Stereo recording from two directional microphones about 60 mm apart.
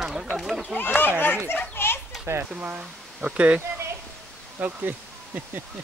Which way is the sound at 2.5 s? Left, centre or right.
Right.